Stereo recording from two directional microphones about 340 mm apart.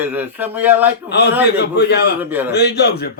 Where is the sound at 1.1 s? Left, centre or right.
Left.